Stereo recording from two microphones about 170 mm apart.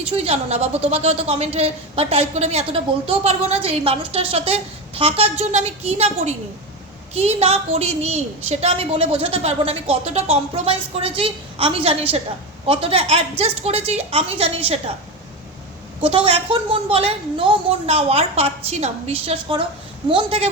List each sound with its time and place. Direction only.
0.2 s a woman's voice: 40° right (ahead or behind)
16.0 s a woman's voice: 35° right (ahead or behind)